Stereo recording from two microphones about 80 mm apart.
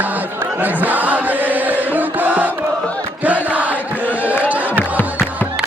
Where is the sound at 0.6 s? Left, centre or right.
Right.